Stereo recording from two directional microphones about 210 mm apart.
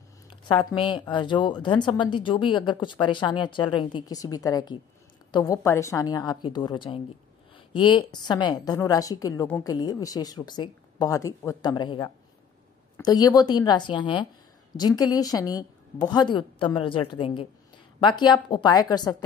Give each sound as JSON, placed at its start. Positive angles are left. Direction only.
{"t": 0.3, "sound": "a woman's voice", "side_deg": 20}